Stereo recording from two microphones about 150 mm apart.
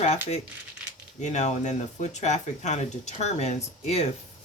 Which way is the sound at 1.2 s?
50° left (ahead or behind).